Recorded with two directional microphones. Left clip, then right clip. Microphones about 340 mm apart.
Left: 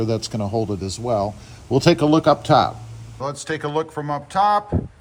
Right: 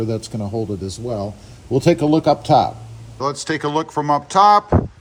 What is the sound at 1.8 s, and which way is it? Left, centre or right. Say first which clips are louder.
Speech: even; centre.